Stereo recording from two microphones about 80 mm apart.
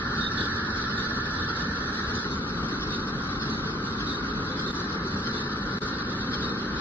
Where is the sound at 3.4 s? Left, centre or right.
Left.